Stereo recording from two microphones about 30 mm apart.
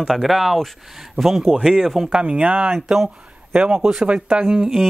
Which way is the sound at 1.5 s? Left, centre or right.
Right.